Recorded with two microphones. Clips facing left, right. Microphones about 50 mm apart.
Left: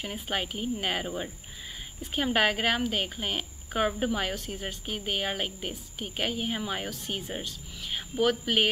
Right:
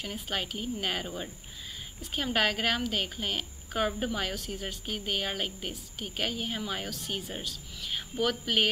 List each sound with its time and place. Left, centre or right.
0.0 s a woman's voice: centre